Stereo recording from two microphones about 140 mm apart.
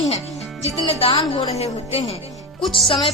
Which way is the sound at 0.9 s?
45° left (ahead or behind).